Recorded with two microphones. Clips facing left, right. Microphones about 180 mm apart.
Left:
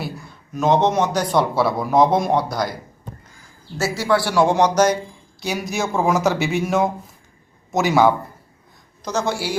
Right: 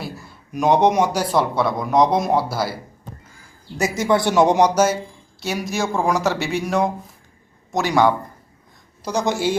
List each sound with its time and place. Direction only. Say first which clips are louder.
0.5 s speech: right 1 dB; 15° right (ahead or behind)
3.8 s speech: right 1 dB; 20° right (ahead or behind); by 8.1 s 5° left (ahead or behind)
9.0 s speech: right 2 dB; 15° right (ahead or behind)